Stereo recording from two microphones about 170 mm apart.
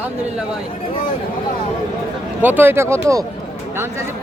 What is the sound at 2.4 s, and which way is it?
Speech, 10° right (ahead or behind).